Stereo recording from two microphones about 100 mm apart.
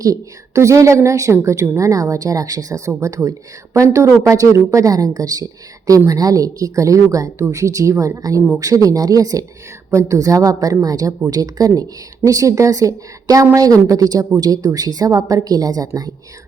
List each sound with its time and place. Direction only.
0.0 s a woman's voice: 35° right (ahead or behind)